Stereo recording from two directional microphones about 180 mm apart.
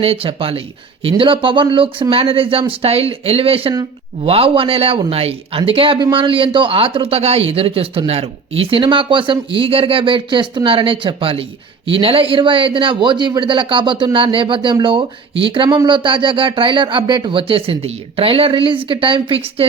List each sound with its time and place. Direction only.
0.0 s speech: 30° right (ahead or behind)